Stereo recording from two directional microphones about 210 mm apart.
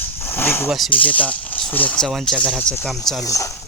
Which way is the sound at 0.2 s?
10° left (ahead or behind).